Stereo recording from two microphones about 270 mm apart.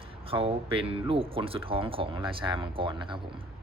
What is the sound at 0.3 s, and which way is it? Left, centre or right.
Speech, right.